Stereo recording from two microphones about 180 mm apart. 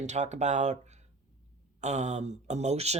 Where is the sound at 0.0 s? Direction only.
40° right (ahead or behind).